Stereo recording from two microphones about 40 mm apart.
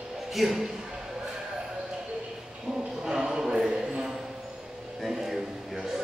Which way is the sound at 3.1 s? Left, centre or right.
Centre.